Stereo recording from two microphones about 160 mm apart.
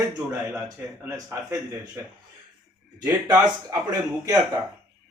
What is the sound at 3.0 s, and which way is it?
Speech, 20° right (ahead or behind).